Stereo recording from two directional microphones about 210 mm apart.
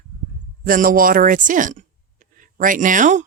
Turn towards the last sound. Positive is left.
turn(degrees=-35)  # may be behind; listen again after turning